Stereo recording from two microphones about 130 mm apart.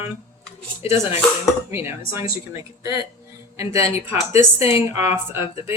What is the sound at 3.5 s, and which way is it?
Speech, 25° right (ahead or behind).